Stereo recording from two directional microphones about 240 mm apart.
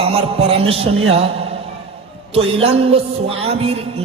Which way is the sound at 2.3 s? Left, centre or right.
Right.